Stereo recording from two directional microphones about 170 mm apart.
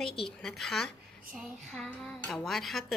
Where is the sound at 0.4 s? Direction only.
Centre (ahead or behind).